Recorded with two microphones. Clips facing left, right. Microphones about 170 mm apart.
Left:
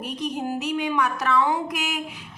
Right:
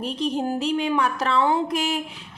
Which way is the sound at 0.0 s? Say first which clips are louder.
Right 4 dB; 30° right (ahead or behind).